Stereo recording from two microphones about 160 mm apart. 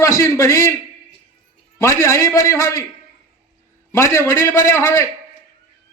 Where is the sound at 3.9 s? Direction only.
15° left (ahead or behind).